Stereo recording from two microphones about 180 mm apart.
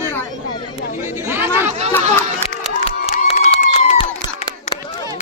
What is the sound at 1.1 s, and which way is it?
Chatter, 10° right (ahead or behind).